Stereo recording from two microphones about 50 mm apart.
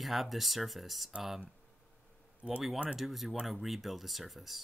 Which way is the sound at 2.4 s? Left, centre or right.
Centre.